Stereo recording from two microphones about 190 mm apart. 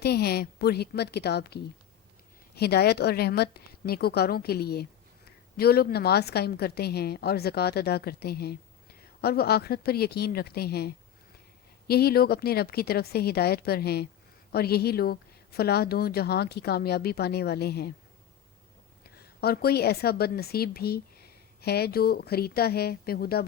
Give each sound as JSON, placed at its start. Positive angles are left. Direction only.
{"t": 0.0, "sound": "a woman's voice", "side_deg": 55}
{"t": 19.0, "sound": "a woman's voice", "side_deg": 55}